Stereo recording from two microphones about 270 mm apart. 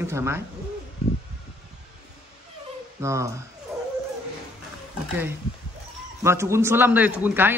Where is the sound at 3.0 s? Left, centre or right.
Centre.